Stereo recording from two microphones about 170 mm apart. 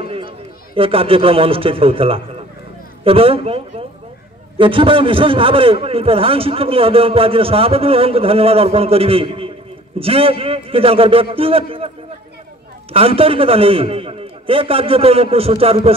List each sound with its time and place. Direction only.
0.0 s run: 35° right (ahead or behind)
0.7 s a man's voice: 35° right (ahead or behind)
12.9 s a man's voice: 35° right (ahead or behind)